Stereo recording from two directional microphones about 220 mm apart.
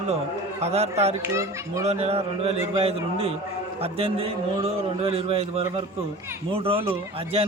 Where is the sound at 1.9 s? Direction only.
30° right (ahead or behind).